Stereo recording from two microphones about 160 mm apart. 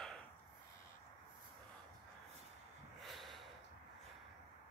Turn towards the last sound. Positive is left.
turn(degrees=0)  # may be behind; listen again after turning